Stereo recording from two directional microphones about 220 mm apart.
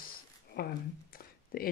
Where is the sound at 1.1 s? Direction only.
40° left (ahead or behind).